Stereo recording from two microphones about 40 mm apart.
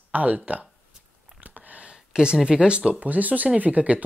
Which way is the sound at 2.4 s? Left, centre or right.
Right.